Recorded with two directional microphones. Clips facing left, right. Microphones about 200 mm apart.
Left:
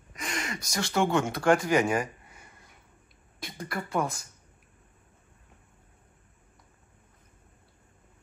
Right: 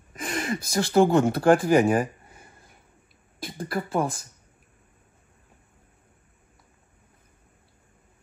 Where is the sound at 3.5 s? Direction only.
30° right (ahead or behind).